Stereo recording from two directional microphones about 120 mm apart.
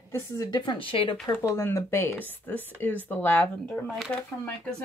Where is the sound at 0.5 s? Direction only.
40° left (ahead or behind).